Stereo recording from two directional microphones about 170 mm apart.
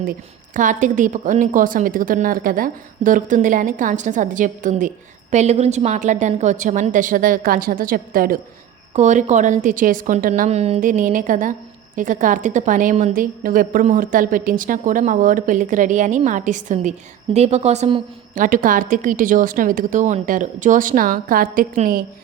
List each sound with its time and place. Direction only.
0.0 s a woman's voice: 55° right (ahead or behind)
8.9 s a woman's voice: 45° right (ahead or behind)
10.5 s a woman's voice: 40° right (ahead or behind)
18.3 s a woman's voice: 50° right (ahead or behind)